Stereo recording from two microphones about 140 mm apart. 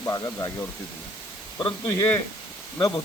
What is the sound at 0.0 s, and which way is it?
Speech, 25° left (ahead or behind).